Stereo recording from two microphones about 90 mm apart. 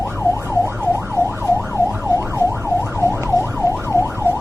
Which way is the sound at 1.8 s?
25° right (ahead or behind).